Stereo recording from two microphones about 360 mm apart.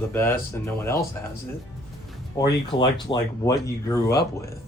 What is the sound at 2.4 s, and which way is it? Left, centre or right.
Speech, centre.